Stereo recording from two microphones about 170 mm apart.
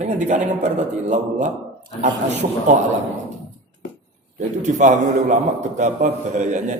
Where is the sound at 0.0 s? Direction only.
45° right (ahead or behind).